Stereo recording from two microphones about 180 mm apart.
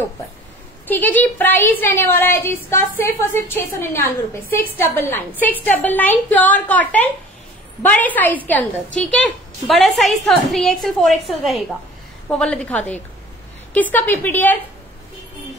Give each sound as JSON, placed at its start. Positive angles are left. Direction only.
{"t": 0.8, "sound": "a woman's voice", "side_deg": 10}